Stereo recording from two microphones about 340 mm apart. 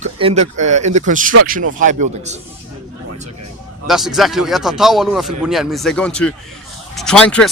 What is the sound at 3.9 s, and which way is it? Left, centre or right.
Speech, centre.